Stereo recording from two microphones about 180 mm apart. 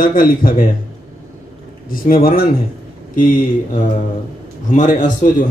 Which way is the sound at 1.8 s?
55° left (ahead or behind).